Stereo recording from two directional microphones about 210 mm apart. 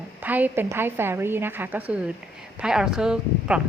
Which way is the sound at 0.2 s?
10° right (ahead or behind).